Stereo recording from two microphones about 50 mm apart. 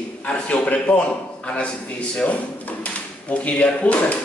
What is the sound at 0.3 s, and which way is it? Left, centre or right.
Speech, left.